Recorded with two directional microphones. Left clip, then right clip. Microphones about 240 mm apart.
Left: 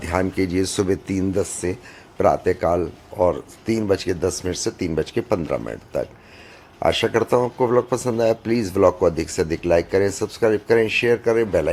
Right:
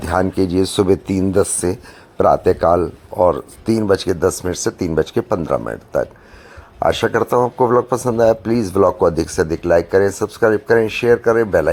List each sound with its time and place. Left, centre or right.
0.0 s speech: centre